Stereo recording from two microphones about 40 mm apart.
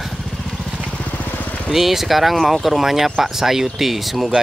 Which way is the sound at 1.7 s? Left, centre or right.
Centre.